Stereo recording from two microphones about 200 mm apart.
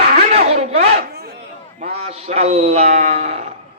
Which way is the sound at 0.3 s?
30° right (ahead or behind).